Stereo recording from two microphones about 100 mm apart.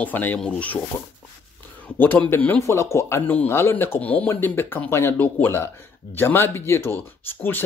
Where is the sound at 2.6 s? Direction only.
30° left (ahead or behind).